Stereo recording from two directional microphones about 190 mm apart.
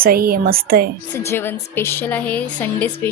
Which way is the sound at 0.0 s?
50° right (ahead or behind).